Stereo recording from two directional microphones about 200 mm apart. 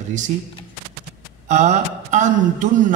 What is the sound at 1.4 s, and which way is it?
Speech, 35° right (ahead or behind).